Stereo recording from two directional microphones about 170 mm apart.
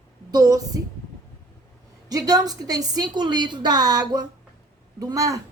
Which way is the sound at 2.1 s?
20° right (ahead or behind).